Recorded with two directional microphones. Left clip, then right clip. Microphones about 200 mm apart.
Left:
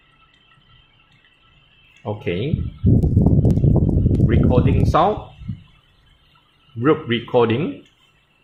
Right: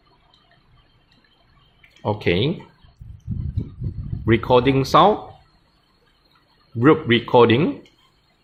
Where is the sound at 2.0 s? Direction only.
30° right (ahead or behind).